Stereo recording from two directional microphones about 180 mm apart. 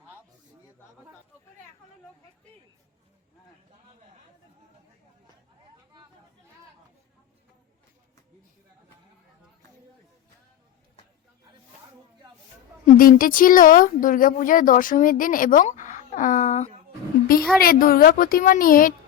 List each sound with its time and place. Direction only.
12.8 s speech: 50° left (ahead or behind)
17.6 s speech: 55° left (ahead or behind)